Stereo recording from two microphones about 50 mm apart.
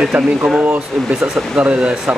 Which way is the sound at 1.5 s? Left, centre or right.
Right.